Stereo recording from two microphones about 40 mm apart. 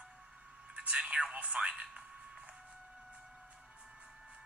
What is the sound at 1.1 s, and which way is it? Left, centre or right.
Music, right.